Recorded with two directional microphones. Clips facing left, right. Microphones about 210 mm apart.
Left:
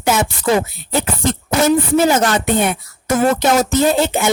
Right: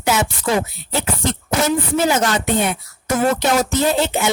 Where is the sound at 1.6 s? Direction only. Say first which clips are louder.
Left 5 dB; 50° left (ahead or behind).